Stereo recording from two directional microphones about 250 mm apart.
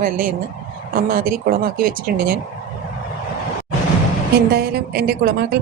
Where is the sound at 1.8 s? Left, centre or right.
Right.